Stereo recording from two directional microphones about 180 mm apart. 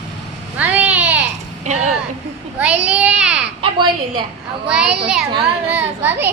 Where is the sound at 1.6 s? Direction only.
40° right (ahead or behind).